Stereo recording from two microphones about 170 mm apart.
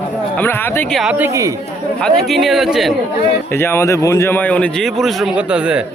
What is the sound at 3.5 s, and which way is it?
Speech, 15° left (ahead or behind).